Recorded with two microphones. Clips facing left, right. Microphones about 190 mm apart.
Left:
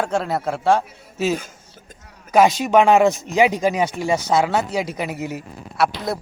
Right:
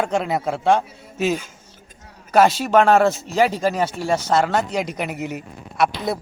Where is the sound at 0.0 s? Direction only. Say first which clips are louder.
Even; centre (ahead or behind).